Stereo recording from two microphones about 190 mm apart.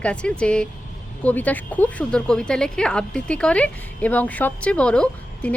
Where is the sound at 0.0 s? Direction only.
5° left (ahead or behind).